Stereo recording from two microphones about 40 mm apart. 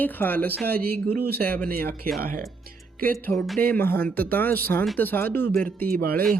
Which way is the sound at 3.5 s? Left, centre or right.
Left.